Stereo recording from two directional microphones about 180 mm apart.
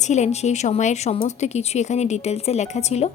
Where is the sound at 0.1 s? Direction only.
40° left (ahead or behind).